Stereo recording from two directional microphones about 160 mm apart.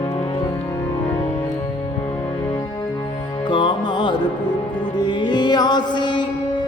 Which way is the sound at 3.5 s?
30° left (ahead or behind).